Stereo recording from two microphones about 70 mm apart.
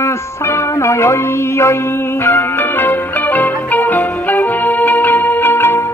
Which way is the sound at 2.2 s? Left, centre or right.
Left.